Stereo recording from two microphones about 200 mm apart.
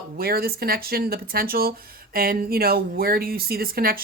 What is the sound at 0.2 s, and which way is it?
Speech, 50° right (ahead or behind).